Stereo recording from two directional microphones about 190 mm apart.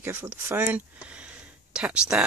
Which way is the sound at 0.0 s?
10° right (ahead or behind).